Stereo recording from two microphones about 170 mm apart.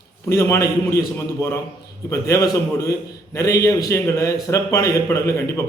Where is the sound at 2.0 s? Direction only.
15° left (ahead or behind).